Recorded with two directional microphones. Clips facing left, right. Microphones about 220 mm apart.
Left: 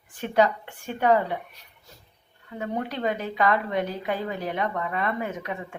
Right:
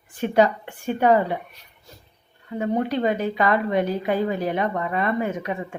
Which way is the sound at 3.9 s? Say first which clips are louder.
Right 6 dB; 35° right (ahead or behind).